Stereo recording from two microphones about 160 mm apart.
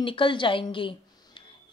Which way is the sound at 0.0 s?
30° left (ahead or behind).